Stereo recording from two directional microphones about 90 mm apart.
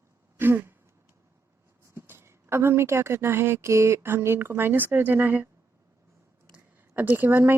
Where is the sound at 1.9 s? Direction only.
25° right (ahead or behind).